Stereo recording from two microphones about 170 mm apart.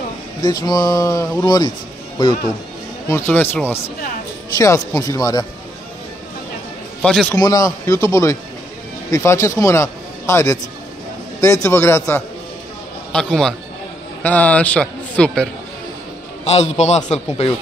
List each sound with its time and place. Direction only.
0.4 s speech: 25° left (ahead or behind)
3.1 s a man's voice: 15° left (ahead or behind)
7.0 s a man's voice: 5° left (ahead or behind)
7.3 s a man's voice: 20° left (ahead or behind)
16.4 s a man's voice: 40° left (ahead or behind)